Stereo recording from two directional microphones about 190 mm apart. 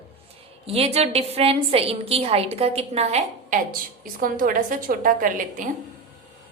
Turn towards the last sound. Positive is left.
turn(degrees=-45)  # may be behind; listen again after turning